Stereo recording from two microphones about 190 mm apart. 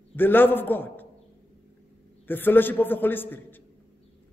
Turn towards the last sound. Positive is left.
turn(degrees=10)  # may be behind; listen again after turning